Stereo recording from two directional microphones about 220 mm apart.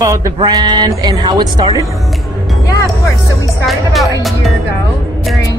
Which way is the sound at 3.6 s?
Centre (ahead or behind).